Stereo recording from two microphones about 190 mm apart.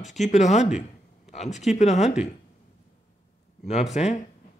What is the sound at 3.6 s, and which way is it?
Speech, 35° left (ahead or behind).